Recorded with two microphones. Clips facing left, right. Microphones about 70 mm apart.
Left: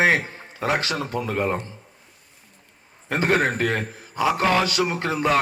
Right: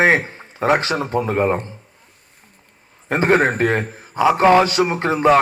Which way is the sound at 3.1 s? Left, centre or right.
Right.